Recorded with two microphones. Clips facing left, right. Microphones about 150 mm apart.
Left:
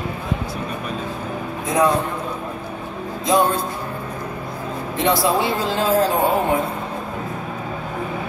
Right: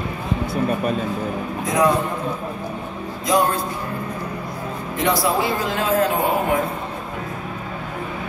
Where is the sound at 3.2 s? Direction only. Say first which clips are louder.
Left 1 dB; 25° left (ahead or behind).